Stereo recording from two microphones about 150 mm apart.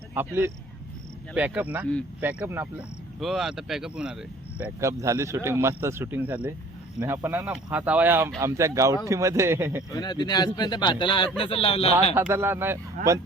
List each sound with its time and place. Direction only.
0.1 s speech: 15° right (ahead or behind)
4.8 s speech: 20° right (ahead or behind)
9.9 s speech: 25° left (ahead or behind)
12.1 s speech: 15° right (ahead or behind)